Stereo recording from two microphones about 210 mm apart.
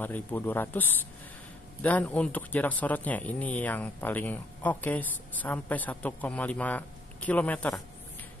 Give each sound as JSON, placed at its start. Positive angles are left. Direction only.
{"t": 0.0, "sound": "speech", "side_deg": 10}